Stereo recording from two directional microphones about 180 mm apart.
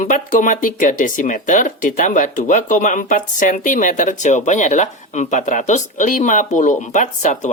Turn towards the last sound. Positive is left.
turn(degrees=45)  # may be behind; listen again after turning